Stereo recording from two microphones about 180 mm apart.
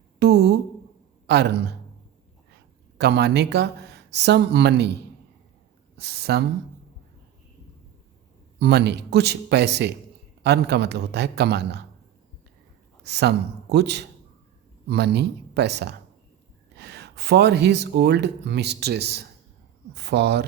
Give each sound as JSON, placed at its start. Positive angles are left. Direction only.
{"t": 0.2, "sound": "speech", "side_deg": -65}
{"t": 3.0, "sound": "speech", "side_deg": -65}
{"t": 6.0, "sound": "speech", "side_deg": -65}
{"t": 8.5, "sound": "speech", "side_deg": -65}
{"t": 13.0, "sound": "speech", "side_deg": -70}